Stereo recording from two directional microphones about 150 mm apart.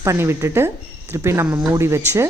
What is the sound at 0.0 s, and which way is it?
A woman's voice, 20° right (ahead or behind).